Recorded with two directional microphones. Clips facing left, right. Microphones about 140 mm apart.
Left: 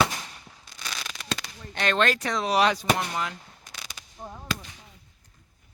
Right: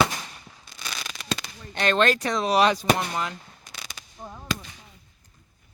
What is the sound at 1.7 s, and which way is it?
Speech, 35° right (ahead or behind).